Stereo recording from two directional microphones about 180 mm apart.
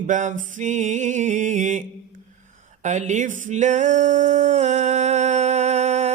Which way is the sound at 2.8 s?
40° right (ahead or behind).